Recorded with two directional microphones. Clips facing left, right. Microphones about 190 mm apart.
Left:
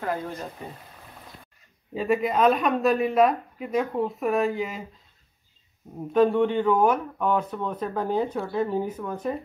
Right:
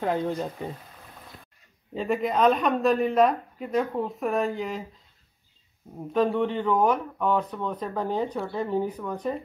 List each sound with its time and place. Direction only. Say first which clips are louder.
0.0 s speech: right 3 dB; 20° right (ahead or behind)
2.0 s speech: left 2 dB; 5° left (ahead or behind)
6.1 s speech: left 4 dB; 10° left (ahead or behind)